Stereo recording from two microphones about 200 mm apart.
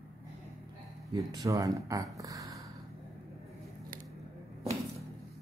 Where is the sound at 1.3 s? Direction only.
15° right (ahead or behind).